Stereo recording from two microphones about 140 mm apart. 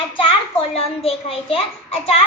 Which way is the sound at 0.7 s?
45° left (ahead or behind).